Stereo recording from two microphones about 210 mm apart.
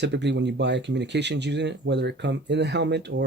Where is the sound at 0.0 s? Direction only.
55° right (ahead or behind).